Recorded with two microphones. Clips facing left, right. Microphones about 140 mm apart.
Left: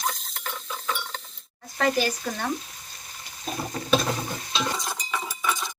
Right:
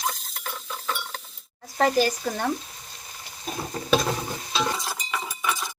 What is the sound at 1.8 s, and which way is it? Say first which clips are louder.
Speech: right 3 dB; 40° right (ahead or behind).